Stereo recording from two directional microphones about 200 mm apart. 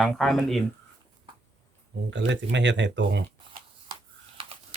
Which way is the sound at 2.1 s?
65° right (ahead or behind).